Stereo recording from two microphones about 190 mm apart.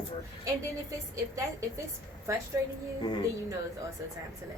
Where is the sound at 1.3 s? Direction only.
15° right (ahead or behind).